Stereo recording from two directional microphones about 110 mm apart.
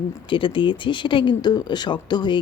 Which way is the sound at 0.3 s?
50° left (ahead or behind).